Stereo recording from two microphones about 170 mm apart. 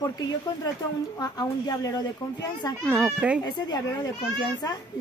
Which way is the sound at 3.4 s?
25° left (ahead or behind).